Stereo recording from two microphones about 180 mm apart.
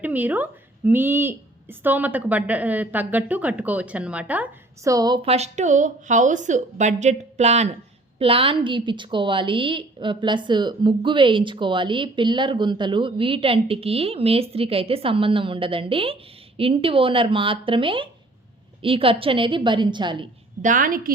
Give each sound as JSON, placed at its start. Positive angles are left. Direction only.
{"t": 0.0, "sound": "a woman's voice", "side_deg": -10}
{"t": 20.6, "sound": "a woman's voice", "side_deg": -45}